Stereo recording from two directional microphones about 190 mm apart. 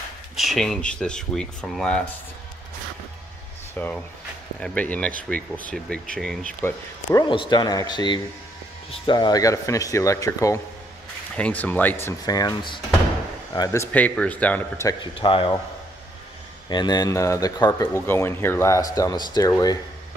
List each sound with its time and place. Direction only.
0.4 s speech: centre (ahead or behind)
3.8 s speech: 10° left (ahead or behind)
7.1 s speech: 20° left (ahead or behind)
15.1 s speech: 25° left (ahead or behind)
16.6 s speech: 20° left (ahead or behind)